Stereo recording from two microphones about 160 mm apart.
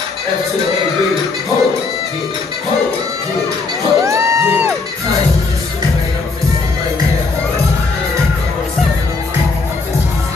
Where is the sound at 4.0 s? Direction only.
20° right (ahead or behind).